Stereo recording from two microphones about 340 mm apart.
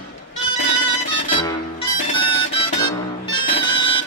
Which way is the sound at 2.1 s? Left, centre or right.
Centre.